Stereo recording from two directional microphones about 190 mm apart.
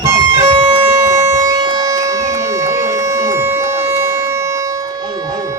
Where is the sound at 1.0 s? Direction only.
15° right (ahead or behind).